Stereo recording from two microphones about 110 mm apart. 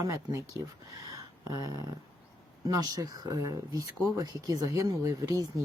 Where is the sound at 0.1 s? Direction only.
25° right (ahead or behind).